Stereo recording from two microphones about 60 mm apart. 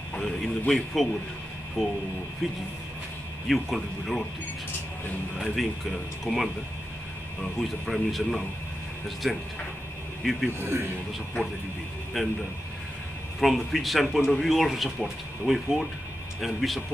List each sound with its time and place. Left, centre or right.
0.1 s speech: centre
5.4 s speech: centre
7.6 s speech: centre
10.6 s a man's voice: right
12.1 s speech: centre